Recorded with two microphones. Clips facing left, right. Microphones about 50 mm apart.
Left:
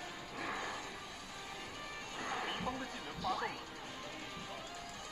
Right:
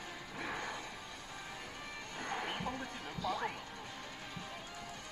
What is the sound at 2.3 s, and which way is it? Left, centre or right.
Horse, centre.